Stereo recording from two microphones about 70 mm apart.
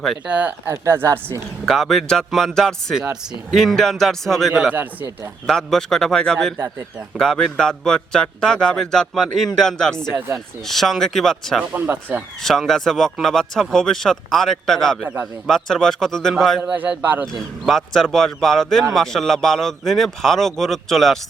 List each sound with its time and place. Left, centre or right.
0.3 s a man's voice: right
0.7 s a woman's voice: right
1.6 s a man's voice: centre
2.9 s speech: centre
3.5 s a man's voice: centre
4.7 s a man's voice: right
5.5 s a man's voice: centre
10.1 s a woman's voice: right
10.7 s a man's voice: centre
16.7 s a man's voice: right
17.7 s a man's voice: centre